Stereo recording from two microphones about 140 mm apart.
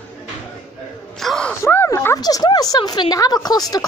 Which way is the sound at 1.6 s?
15° left (ahead or behind).